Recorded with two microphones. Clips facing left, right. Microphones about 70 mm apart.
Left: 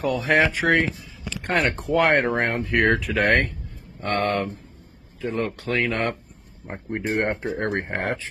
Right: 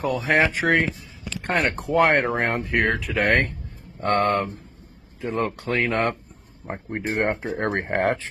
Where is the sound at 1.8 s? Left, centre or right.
Right.